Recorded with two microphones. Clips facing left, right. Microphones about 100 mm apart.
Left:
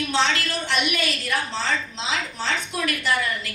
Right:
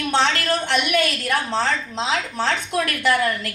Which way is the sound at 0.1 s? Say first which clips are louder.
Right 5 dB; 55° right (ahead or behind).